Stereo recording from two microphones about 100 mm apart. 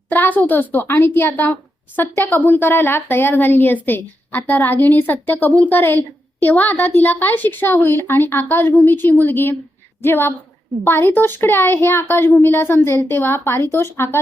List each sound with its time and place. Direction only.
0.1 s a woman's voice: 20° left (ahead or behind)